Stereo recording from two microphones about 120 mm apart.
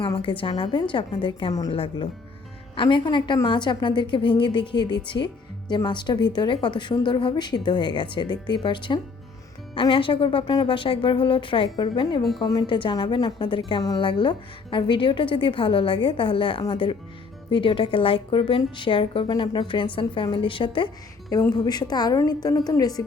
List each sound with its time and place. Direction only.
0.0 s a woman's voice: 50° left (ahead or behind)
21.5 s a woman's voice: 35° left (ahead or behind)